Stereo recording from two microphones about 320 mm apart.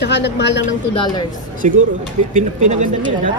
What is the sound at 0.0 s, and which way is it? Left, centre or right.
Speech, left.